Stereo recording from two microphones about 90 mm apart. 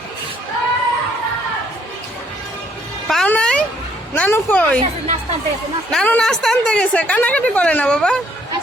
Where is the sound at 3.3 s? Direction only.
10° left (ahead or behind).